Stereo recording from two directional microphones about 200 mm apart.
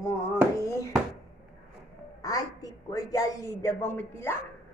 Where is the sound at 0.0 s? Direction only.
15° left (ahead or behind).